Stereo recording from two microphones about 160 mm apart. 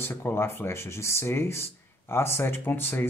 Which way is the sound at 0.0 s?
15° left (ahead or behind).